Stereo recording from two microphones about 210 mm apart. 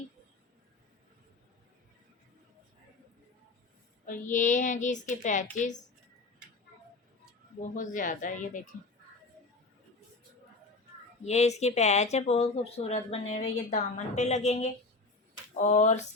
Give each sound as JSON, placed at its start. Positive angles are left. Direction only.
{"t": 4.0, "sound": "speech", "side_deg": 40}
{"t": 7.6, "sound": "speech", "side_deg": 40}
{"t": 11.3, "sound": "speech", "side_deg": 30}